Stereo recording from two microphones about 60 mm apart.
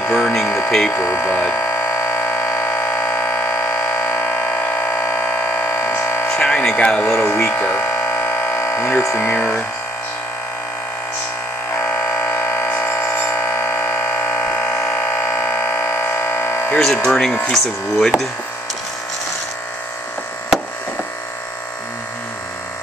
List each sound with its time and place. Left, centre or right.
0.0 s speech: left
0.7 s speech: centre
0.9 s speech: left
1.5 s siren: left
6.3 s a sound: centre
6.8 s speech: centre
7.1 s speech: left
11.8 s siren: left
13.3 s a sound: left
16.7 s speech: centre